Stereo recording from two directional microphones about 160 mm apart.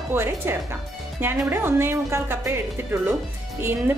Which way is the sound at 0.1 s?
15° right (ahead or behind).